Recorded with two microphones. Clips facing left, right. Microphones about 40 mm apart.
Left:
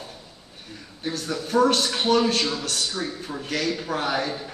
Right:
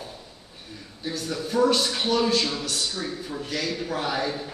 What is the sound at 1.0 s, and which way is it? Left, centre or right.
A man's voice, left.